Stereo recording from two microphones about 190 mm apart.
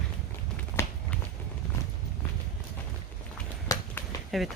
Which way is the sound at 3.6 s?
15° left (ahead or behind).